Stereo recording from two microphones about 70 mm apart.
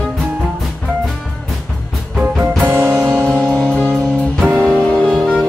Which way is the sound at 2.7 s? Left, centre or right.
Right.